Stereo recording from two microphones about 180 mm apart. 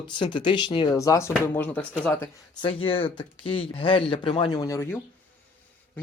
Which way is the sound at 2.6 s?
30° left (ahead or behind).